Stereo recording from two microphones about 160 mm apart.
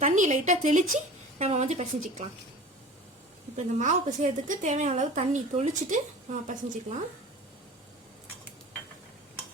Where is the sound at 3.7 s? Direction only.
50° right (ahead or behind).